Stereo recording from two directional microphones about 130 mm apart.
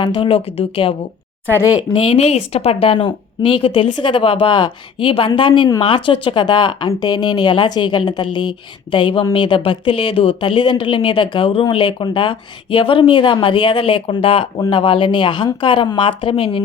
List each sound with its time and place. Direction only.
0.0 s speech: 40° left (ahead or behind)